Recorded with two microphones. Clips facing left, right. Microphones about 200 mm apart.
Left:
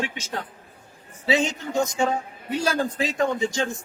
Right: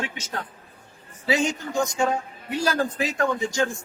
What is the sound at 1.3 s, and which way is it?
A man's voice, 25° left (ahead or behind).